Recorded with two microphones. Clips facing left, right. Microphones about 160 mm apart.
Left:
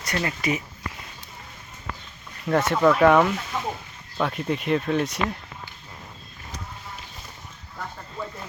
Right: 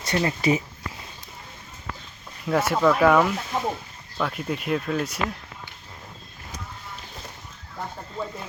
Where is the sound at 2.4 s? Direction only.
5° right (ahead or behind).